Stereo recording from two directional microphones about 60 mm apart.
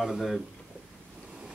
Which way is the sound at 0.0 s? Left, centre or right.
Centre.